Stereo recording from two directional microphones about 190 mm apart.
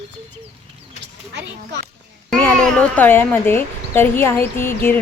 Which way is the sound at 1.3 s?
70° right (ahead or behind).